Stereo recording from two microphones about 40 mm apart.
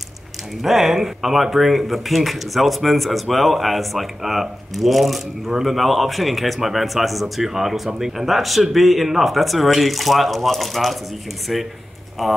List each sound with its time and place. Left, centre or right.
0.6 s speech: centre